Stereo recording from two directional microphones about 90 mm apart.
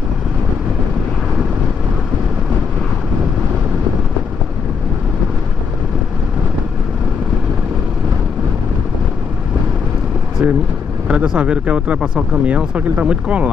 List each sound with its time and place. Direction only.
10.4 s vehicle: 20° right (ahead or behind)
11.1 s speech: 10° right (ahead or behind)